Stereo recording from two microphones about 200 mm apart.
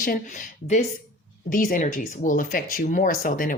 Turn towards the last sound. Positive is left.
turn(degrees=45)  # may be behind; listen again after turning